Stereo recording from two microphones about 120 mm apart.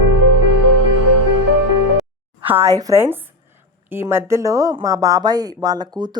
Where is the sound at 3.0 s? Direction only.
15° right (ahead or behind).